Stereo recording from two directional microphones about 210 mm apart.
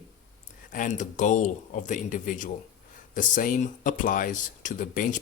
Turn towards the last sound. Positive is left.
turn(degrees=40)  # may be behind; listen again after turning